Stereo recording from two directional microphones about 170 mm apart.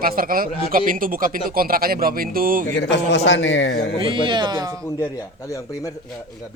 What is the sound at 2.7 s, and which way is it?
A man's voice, 90° left.